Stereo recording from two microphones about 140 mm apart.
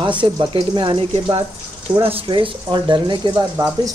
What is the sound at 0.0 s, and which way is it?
Speech, 35° right (ahead or behind).